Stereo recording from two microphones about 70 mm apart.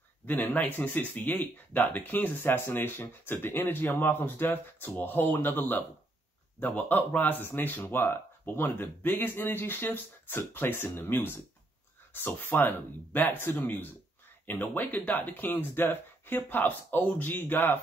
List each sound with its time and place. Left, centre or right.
0.3 s speech: left